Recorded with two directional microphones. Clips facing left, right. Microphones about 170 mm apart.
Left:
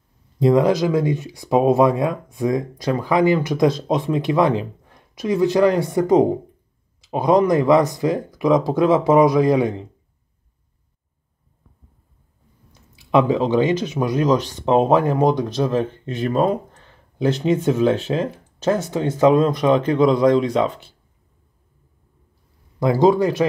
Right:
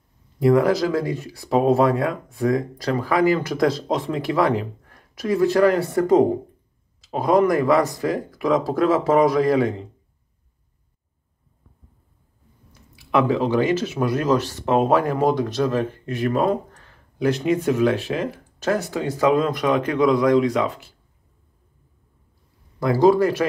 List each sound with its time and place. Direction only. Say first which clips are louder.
0.4 s speech: left 1 dB; 20° left (ahead or behind)
12.9 s speech: left 3 dB; 20° left (ahead or behind)
22.8 s speech: left 1 dB; 20° left (ahead or behind)